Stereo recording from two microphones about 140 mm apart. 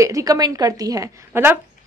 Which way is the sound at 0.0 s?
25° right (ahead or behind).